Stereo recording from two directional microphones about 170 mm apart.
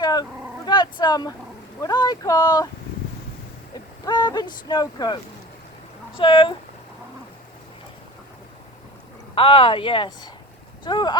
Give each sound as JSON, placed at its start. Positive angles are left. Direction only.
{"t": 0.0, "sound": "dog", "side_deg": 25}
{"t": 1.8, "sound": "speech", "side_deg": 20}
{"t": 4.0, "sound": "speech", "side_deg": 25}
{"t": 9.3, "sound": "speech", "side_deg": 30}